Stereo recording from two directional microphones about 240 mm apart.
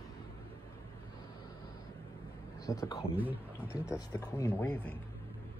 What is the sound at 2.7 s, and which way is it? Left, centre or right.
Speech, centre.